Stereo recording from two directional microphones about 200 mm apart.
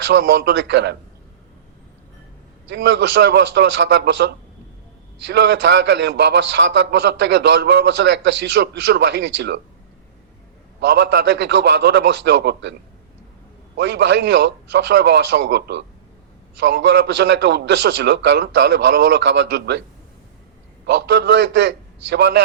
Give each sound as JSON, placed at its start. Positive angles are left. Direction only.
{"t": 0.1, "sound": "a man's voice", "side_deg": -60}
{"t": 2.6, "sound": "a man's voice", "side_deg": -60}
{"t": 10.8, "sound": "a man's voice", "side_deg": -60}
{"t": 13.7, "sound": "a man's voice", "side_deg": -60}
{"t": 20.8, "sound": "a man's voice", "side_deg": -60}